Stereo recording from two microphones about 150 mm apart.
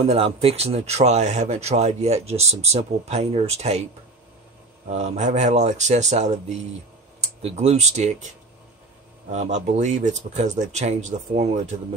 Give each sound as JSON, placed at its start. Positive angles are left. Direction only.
{"t": 0.0, "sound": "speech", "side_deg": -40}
{"t": 4.8, "sound": "speech", "side_deg": -50}
{"t": 7.4, "sound": "speech", "side_deg": -45}
{"t": 9.3, "sound": "speech", "side_deg": -50}